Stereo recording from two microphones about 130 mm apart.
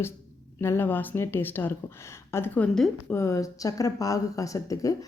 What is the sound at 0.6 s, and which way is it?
Speech, 15° left (ahead or behind).